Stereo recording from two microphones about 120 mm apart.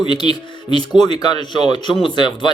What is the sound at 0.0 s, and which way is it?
Speech, 40° left (ahead or behind).